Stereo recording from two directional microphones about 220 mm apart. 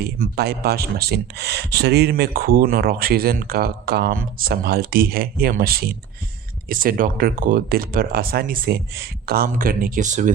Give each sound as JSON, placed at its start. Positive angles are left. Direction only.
{"t": 0.0, "sound": "speech", "side_deg": -45}